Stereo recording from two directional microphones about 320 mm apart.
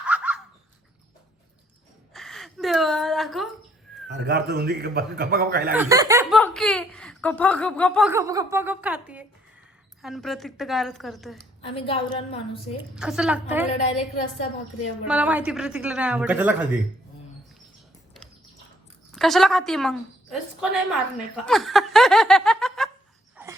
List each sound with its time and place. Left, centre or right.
0.0 s a sound: centre
2.1 s a sound: centre
4.1 s a man's voice: right
5.7 s speech: centre
6.4 s speech: centre
11.6 s a woman's voice: centre
13.0 s speech: centre
19.1 s speech: centre
21.4 s snicker: centre
23.4 s a sound: centre